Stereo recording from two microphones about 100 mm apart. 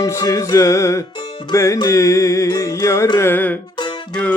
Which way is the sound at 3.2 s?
20° left (ahead or behind).